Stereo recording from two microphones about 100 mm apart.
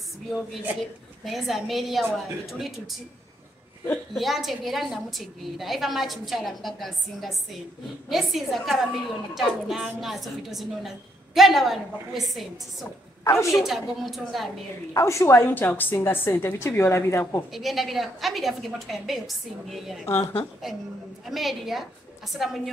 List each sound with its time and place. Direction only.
1.2 s a woman's voice: centre (ahead or behind)
4.1 s a woman's voice: centre (ahead or behind)
13.2 s a woman's voice: 30° left (ahead or behind)
13.5 s a woman's voice: 5° right (ahead or behind)
15.0 s a woman's voice: 30° left (ahead or behind)
17.5 s a woman's voice: centre (ahead or behind)
21.3 s a woman's voice: centre (ahead or behind)